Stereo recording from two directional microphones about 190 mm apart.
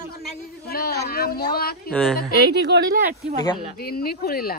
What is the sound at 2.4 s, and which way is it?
Speech, 60° right (ahead or behind).